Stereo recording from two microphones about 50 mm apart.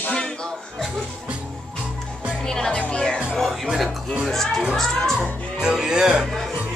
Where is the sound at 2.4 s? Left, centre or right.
Centre.